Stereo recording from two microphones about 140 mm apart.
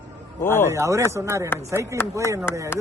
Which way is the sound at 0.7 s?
20° right (ahead or behind).